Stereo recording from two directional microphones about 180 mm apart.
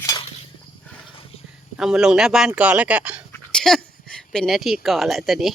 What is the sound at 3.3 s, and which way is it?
Speech, 5° left (ahead or behind).